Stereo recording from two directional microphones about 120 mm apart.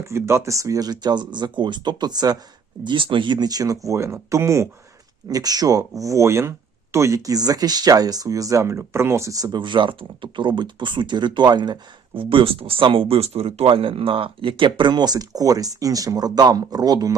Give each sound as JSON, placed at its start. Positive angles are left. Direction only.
{"t": 0.0, "sound": "speech", "side_deg": -20}
{"t": 2.8, "sound": "speech", "side_deg": -45}